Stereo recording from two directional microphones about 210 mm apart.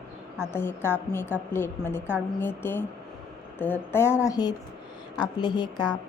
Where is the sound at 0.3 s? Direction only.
10° left (ahead or behind).